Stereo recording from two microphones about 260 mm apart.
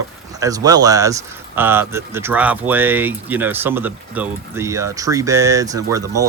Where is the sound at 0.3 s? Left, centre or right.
Centre.